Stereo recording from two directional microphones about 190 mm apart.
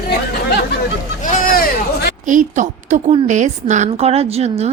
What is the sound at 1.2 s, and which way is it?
Speech, 50° left (ahead or behind).